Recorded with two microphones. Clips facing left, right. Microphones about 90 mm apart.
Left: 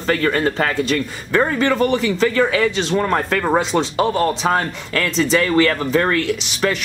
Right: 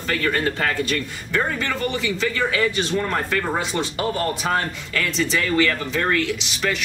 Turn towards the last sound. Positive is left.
turn(degrees=40)  # may be behind; listen again after turning